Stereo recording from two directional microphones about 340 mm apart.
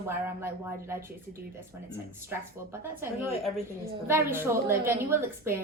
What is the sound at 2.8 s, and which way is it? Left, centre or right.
A woman's voice, centre.